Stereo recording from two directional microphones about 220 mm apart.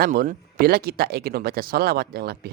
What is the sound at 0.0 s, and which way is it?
Speech, 40° right (ahead or behind).